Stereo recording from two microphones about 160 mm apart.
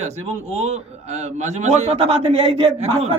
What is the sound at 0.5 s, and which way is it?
A man's voice, 45° right (ahead or behind).